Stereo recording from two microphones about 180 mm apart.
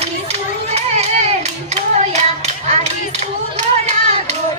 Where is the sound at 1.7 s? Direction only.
40° right (ahead or behind).